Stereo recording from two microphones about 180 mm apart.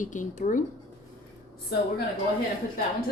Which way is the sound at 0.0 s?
45° left (ahead or behind).